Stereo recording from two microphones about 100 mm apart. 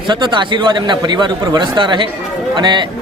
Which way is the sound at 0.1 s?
50° right (ahead or behind).